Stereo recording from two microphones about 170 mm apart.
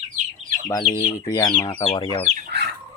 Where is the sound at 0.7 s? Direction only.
25° left (ahead or behind).